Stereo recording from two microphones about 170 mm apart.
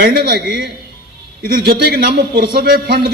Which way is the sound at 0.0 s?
65° right (ahead or behind).